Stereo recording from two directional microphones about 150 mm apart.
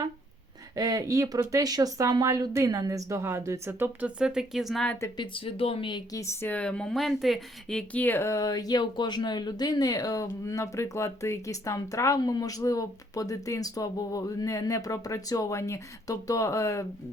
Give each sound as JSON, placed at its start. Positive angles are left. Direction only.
{"t": 0.8, "sound": "speech", "side_deg": -25}
{"t": 5.1, "sound": "speech", "side_deg": 35}